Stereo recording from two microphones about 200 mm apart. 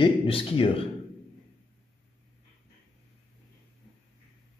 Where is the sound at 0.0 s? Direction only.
25° left (ahead or behind).